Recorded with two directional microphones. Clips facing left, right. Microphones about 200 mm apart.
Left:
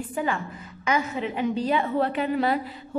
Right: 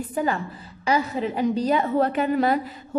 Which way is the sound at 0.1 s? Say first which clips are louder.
Right 3 dB; 40° right (ahead or behind).